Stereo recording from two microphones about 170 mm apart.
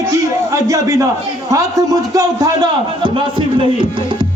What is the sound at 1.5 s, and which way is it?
A man's voice, 20° right (ahead or behind).